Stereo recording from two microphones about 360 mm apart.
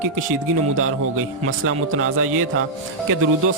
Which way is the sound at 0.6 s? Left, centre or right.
Right.